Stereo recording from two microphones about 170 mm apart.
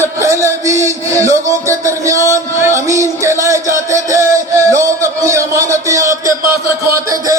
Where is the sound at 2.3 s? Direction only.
15° right (ahead or behind).